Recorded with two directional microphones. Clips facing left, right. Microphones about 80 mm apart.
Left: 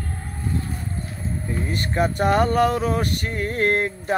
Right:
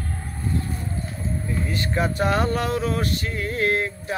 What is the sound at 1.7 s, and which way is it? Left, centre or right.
Male singing, left.